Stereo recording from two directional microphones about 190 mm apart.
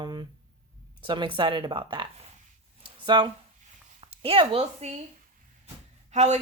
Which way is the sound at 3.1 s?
25° right (ahead or behind).